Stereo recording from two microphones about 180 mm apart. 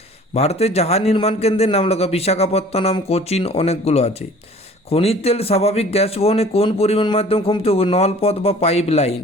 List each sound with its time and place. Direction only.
0.3 s speech: 35° left (ahead or behind)